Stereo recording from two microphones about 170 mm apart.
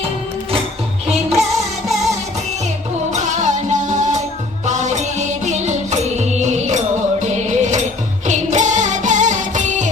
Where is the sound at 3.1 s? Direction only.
45° right (ahead or behind).